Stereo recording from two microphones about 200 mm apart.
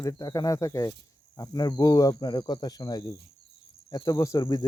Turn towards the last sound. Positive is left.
turn(degrees=20)  # may be behind; listen again after turning